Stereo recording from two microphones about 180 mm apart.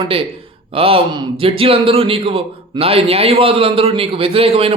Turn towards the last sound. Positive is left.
turn(degrees=-30)  # may be behind; listen again after turning